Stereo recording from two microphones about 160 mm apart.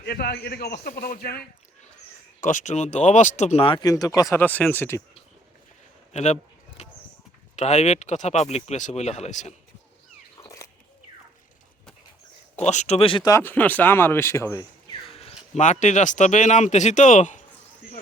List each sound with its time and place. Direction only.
0.0 s a man's voice: 90° left; by 1.5 s 75° left (ahead or behind)
2.4 s speech: 50° left (ahead or behind); by 5.0 s 15° left (ahead or behind)
6.1 s a sound: 45° left (ahead or behind)
7.5 s speech: 45° left (ahead or behind)
10.4 s a sound: 20° left (ahead or behind)
12.6 s speech: 45° left (ahead or behind)
13.3 s speech: 10° left (ahead or behind)
15.1 s a sound: 40° left (ahead or behind)
15.5 s speech: 45° left (ahead or behind)